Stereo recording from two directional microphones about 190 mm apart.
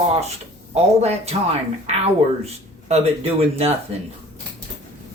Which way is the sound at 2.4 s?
35° right (ahead or behind).